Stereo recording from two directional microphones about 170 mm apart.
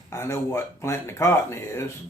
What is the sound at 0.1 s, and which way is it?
Speech, 15° left (ahead or behind).